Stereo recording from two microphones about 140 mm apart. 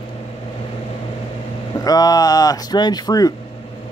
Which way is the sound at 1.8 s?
25° left (ahead or behind).